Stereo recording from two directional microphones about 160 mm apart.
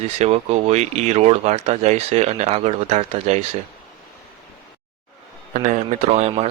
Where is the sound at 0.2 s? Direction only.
40° right (ahead or behind).